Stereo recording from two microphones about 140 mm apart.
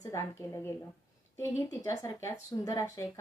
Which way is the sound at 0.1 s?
20° left (ahead or behind).